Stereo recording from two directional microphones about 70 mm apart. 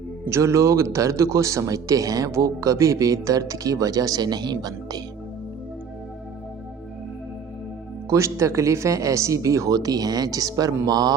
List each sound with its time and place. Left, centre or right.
0.3 s speech: right
8.1 s speech: right
10.8 s a man's voice: right